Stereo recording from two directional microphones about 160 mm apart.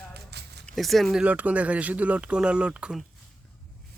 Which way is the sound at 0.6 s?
Centre (ahead or behind).